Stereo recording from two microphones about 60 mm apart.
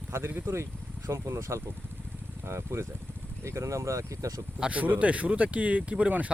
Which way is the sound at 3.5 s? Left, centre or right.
Right.